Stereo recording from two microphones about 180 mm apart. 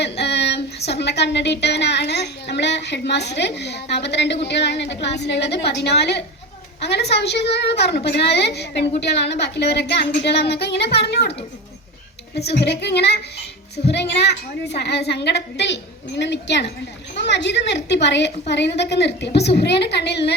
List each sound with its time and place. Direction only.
0.0 s a woman's voice: 70° left (ahead or behind)
12.5 s a woman's voice: 70° left (ahead or behind)